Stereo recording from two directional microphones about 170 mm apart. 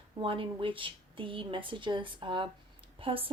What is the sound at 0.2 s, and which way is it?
Speech, 30° right (ahead or behind).